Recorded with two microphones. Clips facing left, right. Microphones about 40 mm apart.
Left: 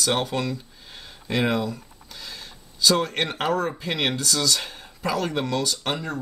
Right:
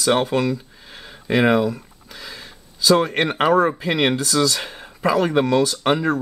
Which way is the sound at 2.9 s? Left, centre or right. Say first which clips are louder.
Right 6 dB; right.